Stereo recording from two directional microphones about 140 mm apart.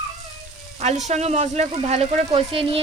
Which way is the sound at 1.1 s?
50° right (ahead or behind).